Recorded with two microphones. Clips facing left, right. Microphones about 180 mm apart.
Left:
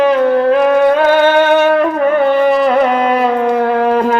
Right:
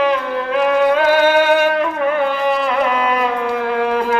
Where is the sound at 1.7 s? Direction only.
45° left (ahead or behind).